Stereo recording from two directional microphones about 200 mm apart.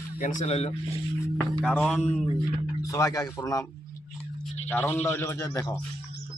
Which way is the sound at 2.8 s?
15° left (ahead or behind).